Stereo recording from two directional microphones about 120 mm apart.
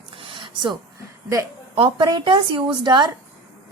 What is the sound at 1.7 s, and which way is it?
A woman's voice, 50° right (ahead or behind).